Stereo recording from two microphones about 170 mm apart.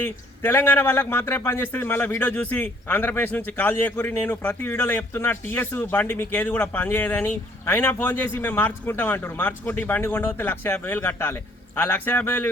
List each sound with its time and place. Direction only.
0.0 s a man's voice: 15° left (ahead or behind)